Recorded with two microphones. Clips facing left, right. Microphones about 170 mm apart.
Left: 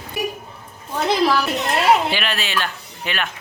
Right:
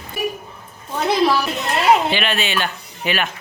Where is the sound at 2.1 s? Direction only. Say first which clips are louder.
Right 3 dB; centre (ahead or behind).